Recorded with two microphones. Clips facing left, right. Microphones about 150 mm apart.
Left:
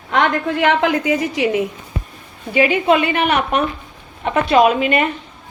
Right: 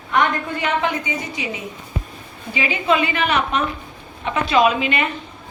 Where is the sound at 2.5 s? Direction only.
55° left (ahead or behind).